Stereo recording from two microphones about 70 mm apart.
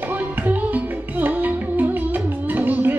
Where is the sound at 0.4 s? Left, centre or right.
Right.